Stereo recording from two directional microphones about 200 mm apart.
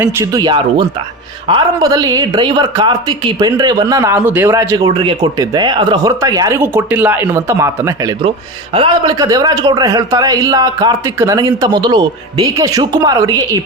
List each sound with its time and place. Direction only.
0.0 s speech: 15° right (ahead or behind)